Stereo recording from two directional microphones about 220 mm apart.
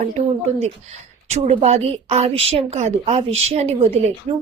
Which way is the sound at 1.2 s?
30° right (ahead or behind).